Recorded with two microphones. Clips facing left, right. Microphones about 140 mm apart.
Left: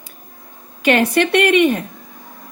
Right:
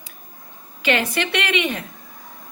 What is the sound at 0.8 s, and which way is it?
A woman's voice, 55° left (ahead or behind).